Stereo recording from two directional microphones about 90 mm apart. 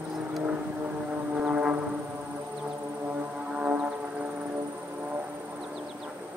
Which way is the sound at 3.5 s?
15° right (ahead or behind).